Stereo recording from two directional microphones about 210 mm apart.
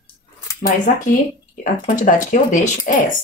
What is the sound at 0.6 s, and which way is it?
Speech, 35° left (ahead or behind).